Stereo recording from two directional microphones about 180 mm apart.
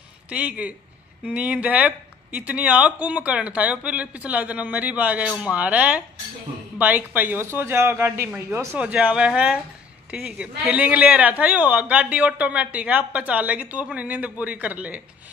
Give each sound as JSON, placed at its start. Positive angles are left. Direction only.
{"t": 0.3, "sound": "a man's voice", "side_deg": -5}